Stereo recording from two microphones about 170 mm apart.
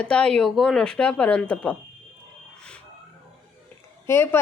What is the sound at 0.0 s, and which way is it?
Speech, 5° left (ahead or behind).